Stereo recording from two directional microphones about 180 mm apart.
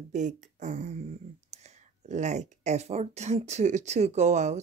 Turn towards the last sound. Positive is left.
turn(degrees=-40)  # may be behind; listen again after turning